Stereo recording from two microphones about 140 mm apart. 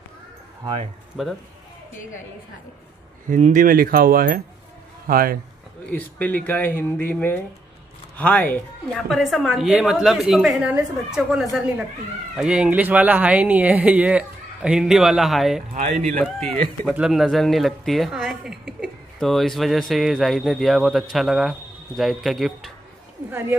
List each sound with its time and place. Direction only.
1.1 s speech: centre (ahead or behind)
3.3 s a man's voice: 65° right (ahead or behind); by 5.4 s 90° right
5.9 s speech: 10° left (ahead or behind)
8.5 s speech: centre (ahead or behind)
15.7 s speech: 65° right (ahead or behind)
16.8 s speech: 5° right (ahead or behind)